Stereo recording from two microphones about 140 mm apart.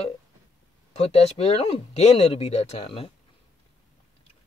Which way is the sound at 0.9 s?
45° left (ahead or behind).